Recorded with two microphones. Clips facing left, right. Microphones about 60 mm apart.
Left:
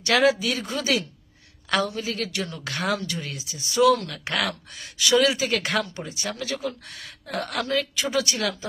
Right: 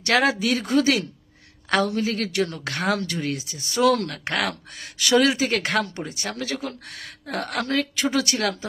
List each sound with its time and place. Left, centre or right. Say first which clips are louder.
0.0 s speech: even; right
7.3 s speech: right 1 dB; right
7.6 s speech: right 3 dB; right